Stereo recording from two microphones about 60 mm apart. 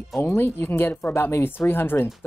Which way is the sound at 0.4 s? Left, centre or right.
Left.